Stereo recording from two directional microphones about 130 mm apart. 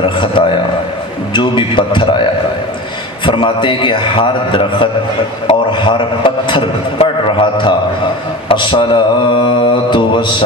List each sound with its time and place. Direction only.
0.0 s a man's voice: 40° left (ahead or behind)
3.3 s a man's voice: 40° left (ahead or behind)